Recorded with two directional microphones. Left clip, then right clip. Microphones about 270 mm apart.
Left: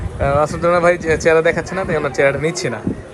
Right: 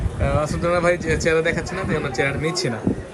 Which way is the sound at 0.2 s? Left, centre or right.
Centre.